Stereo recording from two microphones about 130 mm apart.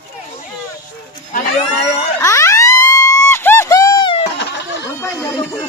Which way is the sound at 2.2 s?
20° left (ahead or behind).